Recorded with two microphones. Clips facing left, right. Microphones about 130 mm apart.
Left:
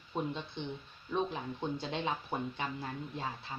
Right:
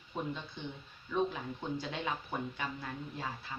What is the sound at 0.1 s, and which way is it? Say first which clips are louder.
Speech: left 3 dB; 25° left (ahead or behind).